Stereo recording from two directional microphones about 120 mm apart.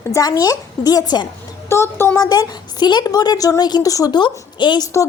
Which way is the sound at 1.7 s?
20° left (ahead or behind).